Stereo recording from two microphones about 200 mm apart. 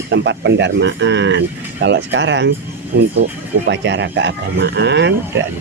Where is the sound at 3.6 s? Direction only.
65° right (ahead or behind).